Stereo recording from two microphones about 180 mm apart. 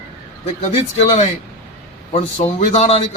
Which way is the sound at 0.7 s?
35° left (ahead or behind).